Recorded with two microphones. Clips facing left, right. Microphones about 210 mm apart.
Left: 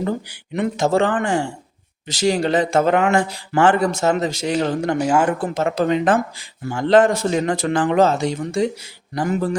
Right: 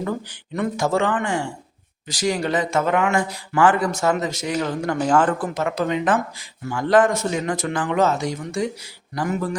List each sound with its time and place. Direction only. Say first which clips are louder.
0.3 s speech: left 2 dB; 20° left (ahead or behind)
4.9 s speech: right 1 dB; 10° left (ahead or behind)
5.4 s speech: left 3 dB; 30° left (ahead or behind)